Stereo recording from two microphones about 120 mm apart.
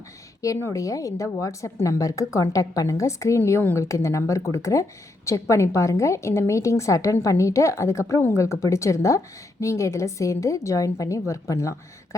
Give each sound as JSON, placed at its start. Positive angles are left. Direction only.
{"t": 0.4, "sound": "a woman's voice", "side_deg": 30}